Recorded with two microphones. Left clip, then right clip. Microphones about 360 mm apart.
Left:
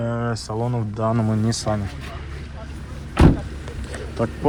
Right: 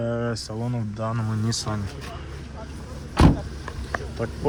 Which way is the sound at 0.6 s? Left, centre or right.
Left.